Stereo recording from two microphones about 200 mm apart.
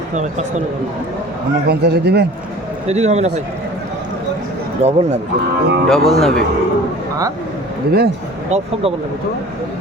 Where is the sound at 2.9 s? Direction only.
35° right (ahead or behind).